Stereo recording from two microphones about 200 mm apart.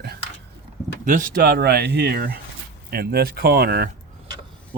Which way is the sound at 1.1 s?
40° right (ahead or behind).